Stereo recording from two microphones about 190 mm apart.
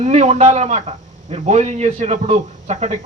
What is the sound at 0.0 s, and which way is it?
A man's voice, 35° right (ahead or behind).